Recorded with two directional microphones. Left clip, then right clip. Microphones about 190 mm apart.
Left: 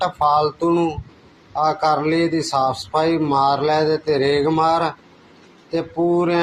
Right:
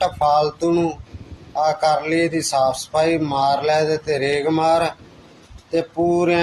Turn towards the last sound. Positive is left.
turn(degrees=-20)  # may be behind; listen again after turning